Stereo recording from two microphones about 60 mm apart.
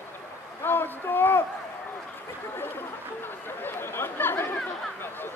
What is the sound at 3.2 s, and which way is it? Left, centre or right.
Chatter, left.